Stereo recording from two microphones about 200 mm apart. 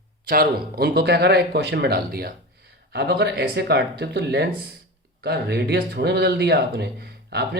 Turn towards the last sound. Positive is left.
turn(degrees=-55)  # may be behind; listen again after turning